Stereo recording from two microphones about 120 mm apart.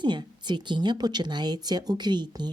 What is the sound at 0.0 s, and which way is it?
Speech, 40° right (ahead or behind).